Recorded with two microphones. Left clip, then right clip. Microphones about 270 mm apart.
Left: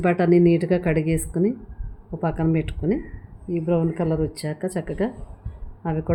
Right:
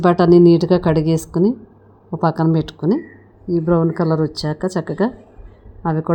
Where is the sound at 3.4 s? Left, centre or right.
Centre.